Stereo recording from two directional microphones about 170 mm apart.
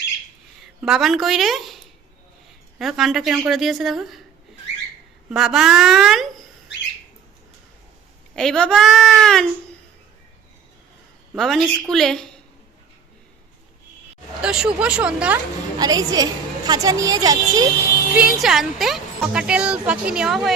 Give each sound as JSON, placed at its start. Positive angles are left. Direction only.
{"t": 0.6, "sound": "a woman's voice", "side_deg": 0}
{"t": 5.3, "sound": "speech", "side_deg": 0}
{"t": 8.4, "sound": "speech", "side_deg": 5}
{"t": 11.3, "sound": "speech", "side_deg": 0}
{"t": 14.4, "sound": "speech", "side_deg": -5}
{"t": 15.8, "sound": "a woman's voice", "side_deg": -20}
{"t": 18.1, "sound": "speech", "side_deg": -5}